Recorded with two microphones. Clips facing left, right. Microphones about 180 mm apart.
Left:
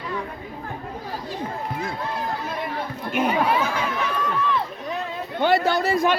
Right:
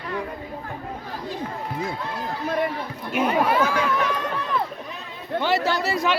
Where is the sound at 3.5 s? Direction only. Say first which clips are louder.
Right 2 dB; 55° right (ahead or behind).